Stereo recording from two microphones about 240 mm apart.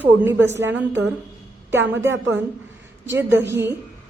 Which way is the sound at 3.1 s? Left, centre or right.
Centre.